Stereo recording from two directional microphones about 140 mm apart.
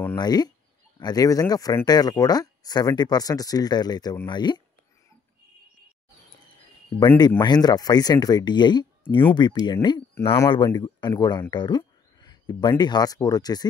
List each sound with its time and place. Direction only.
0.2 s speech: 30° left (ahead or behind)
7.2 s speech: 30° left (ahead or behind)